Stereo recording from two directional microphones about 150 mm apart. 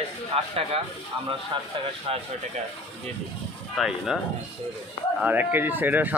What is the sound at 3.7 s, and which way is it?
Speech, centre (ahead or behind).